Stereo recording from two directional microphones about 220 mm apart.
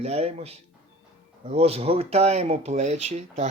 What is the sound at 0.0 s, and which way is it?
Speech, 30° right (ahead or behind).